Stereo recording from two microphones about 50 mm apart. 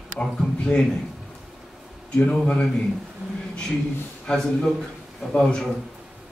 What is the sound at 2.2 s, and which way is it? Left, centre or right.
Speech, left.